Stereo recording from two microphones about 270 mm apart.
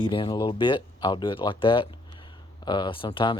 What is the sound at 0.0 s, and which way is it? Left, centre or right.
Speech, centre.